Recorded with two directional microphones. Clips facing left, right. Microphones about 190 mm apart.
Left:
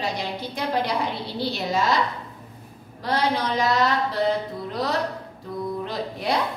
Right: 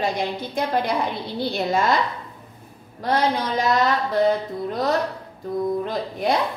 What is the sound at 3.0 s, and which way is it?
Speech, 50° right (ahead or behind).